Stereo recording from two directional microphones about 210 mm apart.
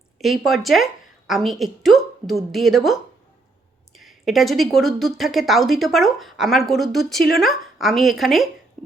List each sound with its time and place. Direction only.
0.2 s speech: centre (ahead or behind)